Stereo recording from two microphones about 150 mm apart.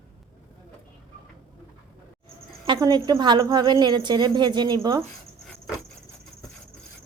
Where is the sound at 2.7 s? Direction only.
30° right (ahead or behind).